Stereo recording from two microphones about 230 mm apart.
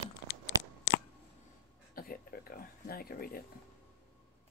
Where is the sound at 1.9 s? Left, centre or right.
Left.